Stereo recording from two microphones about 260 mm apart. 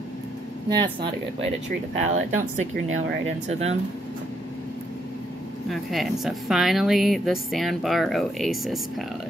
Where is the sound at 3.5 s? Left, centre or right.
Right.